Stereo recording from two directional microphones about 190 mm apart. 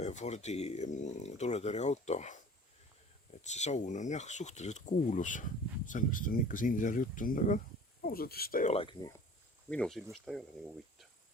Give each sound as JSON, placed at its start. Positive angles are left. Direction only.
{"t": 0.0, "sound": "speech", "side_deg": 40}
{"t": 3.4, "sound": "speech", "side_deg": 35}
{"t": 8.7, "sound": "speech", "side_deg": 25}
{"t": 9.6, "sound": "speech", "side_deg": 5}